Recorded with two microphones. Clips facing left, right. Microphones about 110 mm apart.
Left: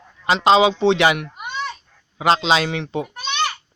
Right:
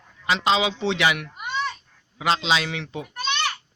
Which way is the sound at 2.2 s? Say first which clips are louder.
Left 5 dB; 45° left (ahead or behind).